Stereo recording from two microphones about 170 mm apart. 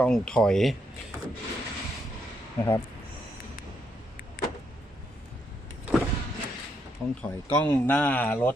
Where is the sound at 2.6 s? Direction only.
10° left (ahead or behind).